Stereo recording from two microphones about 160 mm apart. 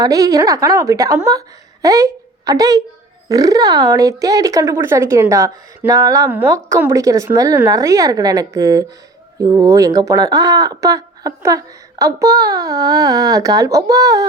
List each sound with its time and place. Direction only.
0.0 s speech: 20° right (ahead or behind)